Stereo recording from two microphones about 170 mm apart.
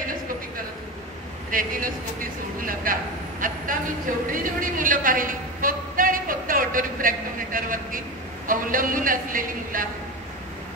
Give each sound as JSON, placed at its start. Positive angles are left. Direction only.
{"t": 1.5, "sound": "a man's voice", "side_deg": -55}